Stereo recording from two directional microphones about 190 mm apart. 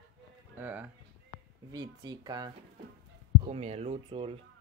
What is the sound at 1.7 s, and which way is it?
Speech, 20° right (ahead or behind).